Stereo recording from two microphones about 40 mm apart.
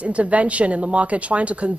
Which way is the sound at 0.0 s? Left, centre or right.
Right.